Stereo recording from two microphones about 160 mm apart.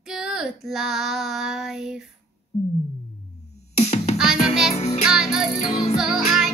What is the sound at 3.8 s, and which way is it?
Music, 40° left (ahead or behind).